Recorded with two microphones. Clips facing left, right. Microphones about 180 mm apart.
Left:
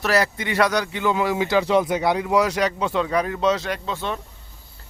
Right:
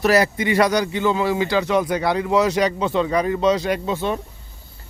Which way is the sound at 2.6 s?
Centre (ahead or behind).